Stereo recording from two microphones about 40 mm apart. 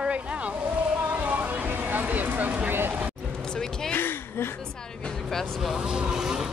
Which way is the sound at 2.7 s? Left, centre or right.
Right.